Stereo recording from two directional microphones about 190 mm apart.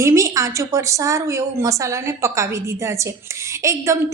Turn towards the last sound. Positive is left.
turn(degrees=-15)  # may be behind; listen again after turning